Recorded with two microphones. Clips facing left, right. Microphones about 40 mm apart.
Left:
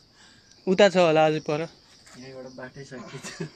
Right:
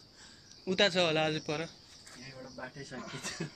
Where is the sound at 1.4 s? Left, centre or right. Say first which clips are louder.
Left 9 dB; left.